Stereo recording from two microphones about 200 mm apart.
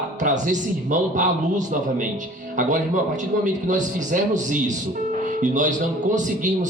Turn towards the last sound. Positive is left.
turn(degrees=-40)  # may be behind; listen again after turning